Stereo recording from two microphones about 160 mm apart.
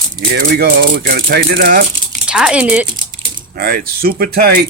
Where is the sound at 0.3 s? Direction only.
75° right (ahead or behind).